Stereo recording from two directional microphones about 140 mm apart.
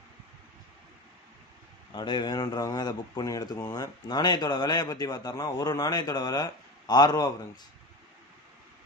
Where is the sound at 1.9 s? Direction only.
30° left (ahead or behind).